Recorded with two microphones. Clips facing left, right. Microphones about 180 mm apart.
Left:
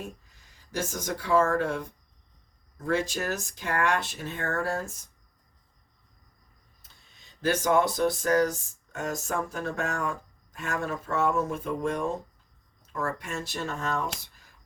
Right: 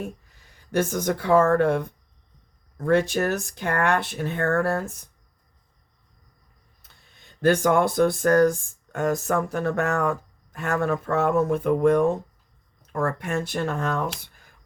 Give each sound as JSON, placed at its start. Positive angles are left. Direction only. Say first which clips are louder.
{"t": 0.5, "sound": "speech", "louder": "right 9 dB", "side_deg": -60}
{"t": 6.8, "sound": "speech", "louder": "right 5 dB", "side_deg": -55}